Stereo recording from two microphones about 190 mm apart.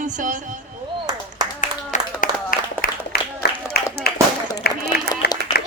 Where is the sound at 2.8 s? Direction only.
50° left (ahead or behind).